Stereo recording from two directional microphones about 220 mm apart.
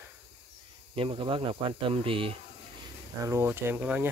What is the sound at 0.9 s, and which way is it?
Speech, 25° right (ahead or behind).